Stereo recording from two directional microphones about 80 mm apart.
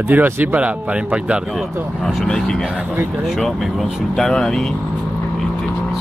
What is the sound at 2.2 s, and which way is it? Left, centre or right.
Speech, centre.